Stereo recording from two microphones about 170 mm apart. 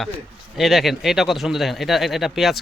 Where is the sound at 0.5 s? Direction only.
Centre (ahead or behind).